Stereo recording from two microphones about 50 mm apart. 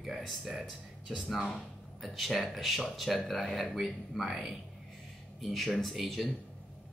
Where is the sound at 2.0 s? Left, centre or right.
Centre.